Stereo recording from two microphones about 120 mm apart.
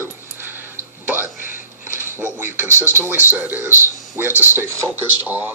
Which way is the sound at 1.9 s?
20° right (ahead or behind).